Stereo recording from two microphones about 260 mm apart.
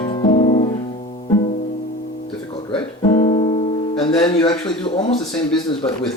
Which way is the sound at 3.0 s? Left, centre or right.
Left.